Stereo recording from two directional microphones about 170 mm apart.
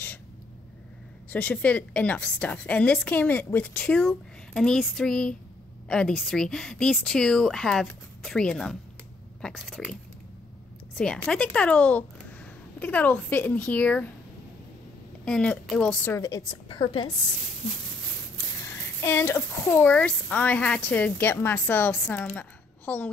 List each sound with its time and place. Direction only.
1.3 s speech: 10° left (ahead or behind)
11.0 s speech: 5° left (ahead or behind)
15.2 s speech: 5° left (ahead or behind)
16.2 s a woman's voice: 20° left (ahead or behind)
18.9 s speech: 15° left (ahead or behind)